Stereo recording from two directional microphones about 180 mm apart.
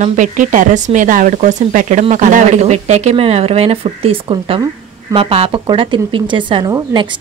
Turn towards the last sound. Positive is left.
turn(degrees=-25)  # may be behind; listen again after turning